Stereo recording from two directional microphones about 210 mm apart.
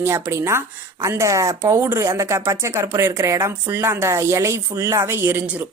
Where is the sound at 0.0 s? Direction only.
10° right (ahead or behind).